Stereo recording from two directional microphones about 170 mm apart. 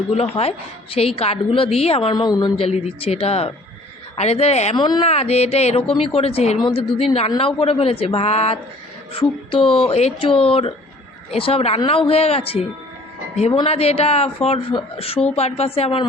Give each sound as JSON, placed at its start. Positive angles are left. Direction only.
{"t": 0.1, "sound": "a man's voice", "side_deg": 35}
{"t": 2.6, "sound": "a man's voice", "side_deg": 40}
{"t": 4.8, "sound": "a man's voice", "side_deg": 30}